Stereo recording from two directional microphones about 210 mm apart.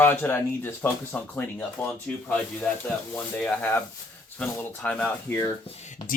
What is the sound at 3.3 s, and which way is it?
Speech, 5° left (ahead or behind).